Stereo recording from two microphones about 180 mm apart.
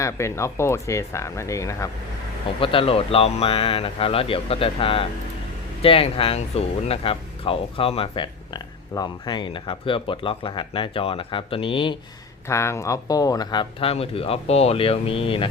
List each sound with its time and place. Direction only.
0.0 s speech: 15° left (ahead or behind)
2.6 s speech: 30° left (ahead or behind)
12.5 s speech: 15° left (ahead or behind)